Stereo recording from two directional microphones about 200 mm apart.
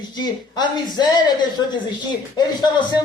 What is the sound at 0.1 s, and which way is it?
Speech, 20° left (ahead or behind).